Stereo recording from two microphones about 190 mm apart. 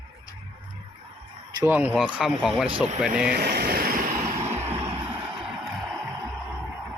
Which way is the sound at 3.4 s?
55° right (ahead or behind).